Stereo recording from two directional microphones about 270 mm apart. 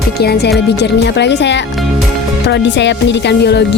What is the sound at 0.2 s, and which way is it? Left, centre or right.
Speech, left.